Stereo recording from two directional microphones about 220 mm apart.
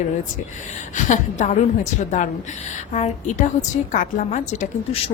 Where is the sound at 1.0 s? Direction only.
35° left (ahead or behind).